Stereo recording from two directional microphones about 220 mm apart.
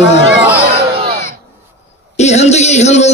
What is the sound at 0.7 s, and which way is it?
Crowd, 45° right (ahead or behind).